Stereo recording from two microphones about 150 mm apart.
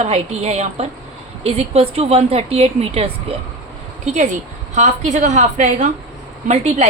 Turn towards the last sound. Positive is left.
turn(degrees=-50)  # may be behind; listen again after turning